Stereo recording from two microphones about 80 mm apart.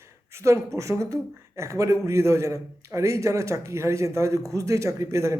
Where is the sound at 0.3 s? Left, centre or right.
Right.